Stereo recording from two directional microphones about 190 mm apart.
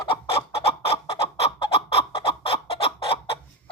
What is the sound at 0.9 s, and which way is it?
Chicken, 30° left (ahead or behind).